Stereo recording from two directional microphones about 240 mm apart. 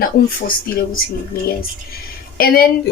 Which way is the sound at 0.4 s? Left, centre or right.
Left.